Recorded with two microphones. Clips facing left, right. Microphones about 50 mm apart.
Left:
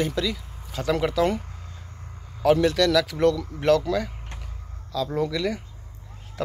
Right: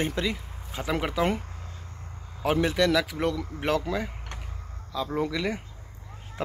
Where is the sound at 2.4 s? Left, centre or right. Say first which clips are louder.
Left 4 dB; centre.